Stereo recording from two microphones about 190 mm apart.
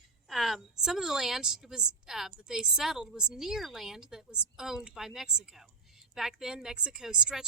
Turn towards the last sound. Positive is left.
turn(degrees=-5)  # may be behind; listen again after turning